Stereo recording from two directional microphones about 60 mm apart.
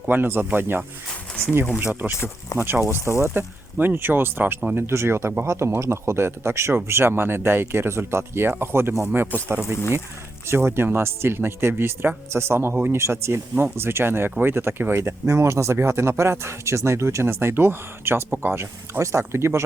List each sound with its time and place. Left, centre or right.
0.1 s speech: right
1.8 s speech: right
2.5 s speech: left
2.9 s speech: right